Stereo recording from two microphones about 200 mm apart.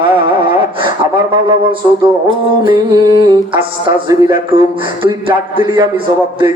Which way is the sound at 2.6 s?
20° right (ahead or behind).